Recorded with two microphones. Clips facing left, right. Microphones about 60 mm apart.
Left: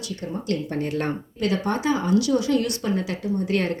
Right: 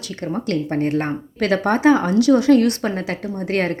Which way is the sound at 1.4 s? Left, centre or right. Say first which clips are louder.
Right 7 dB; right.